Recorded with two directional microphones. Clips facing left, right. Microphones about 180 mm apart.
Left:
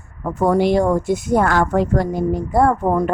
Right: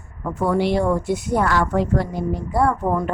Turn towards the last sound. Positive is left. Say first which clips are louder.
# left 4 dB
turn(degrees=45)  # may be behind; listen again after turning